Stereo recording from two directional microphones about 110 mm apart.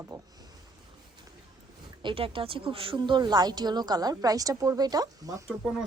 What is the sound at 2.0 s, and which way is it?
Speech, 50° right (ahead or behind).